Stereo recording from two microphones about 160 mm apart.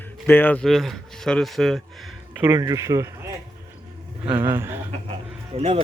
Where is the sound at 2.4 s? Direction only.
20° right (ahead or behind).